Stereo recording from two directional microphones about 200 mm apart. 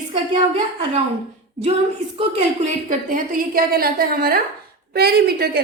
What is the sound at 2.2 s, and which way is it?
A woman's voice, 35° right (ahead or behind).